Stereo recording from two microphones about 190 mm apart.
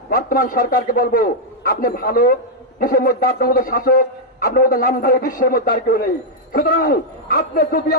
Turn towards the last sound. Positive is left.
turn(degrees=50)  # may be behind; listen again after turning